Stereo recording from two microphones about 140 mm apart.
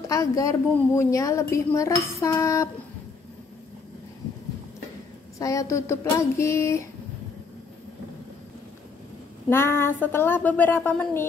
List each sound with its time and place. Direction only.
0.1 s a woman's voice: 25° left (ahead or behind)
5.4 s a woman's voice: 20° left (ahead or behind)
9.5 s a woman's voice: 15° left (ahead or behind)